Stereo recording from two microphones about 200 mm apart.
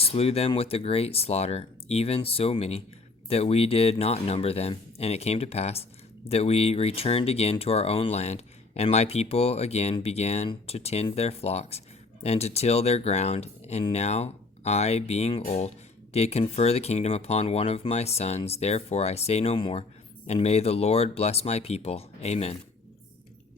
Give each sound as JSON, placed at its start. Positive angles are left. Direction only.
{"t": 0.0, "sound": "speech", "side_deg": 30}